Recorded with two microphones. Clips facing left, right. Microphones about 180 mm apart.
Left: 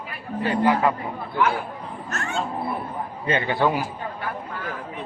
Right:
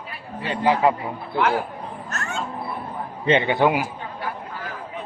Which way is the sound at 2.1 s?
45° right (ahead or behind).